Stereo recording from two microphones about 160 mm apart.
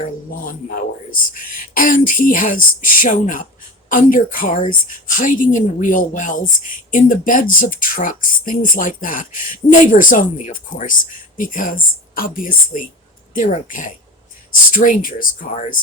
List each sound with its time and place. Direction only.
1.1 s speech: 60° left (ahead or behind)